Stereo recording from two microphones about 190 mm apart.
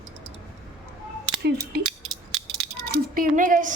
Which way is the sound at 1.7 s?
55° right (ahead or behind).